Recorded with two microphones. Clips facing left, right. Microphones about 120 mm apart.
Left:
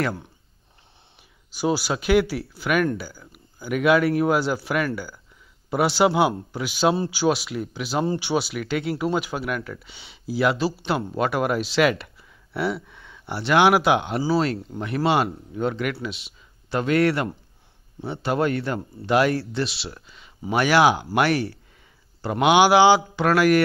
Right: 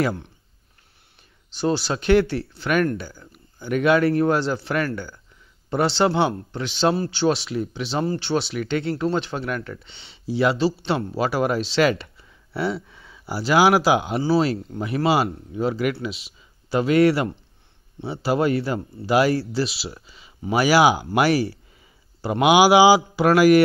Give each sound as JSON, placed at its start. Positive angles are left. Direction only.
{"t": 1.5, "sound": "a man's voice", "side_deg": 5}